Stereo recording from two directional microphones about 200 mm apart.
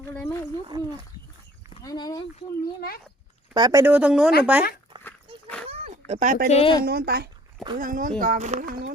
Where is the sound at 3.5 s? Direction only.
20° right (ahead or behind).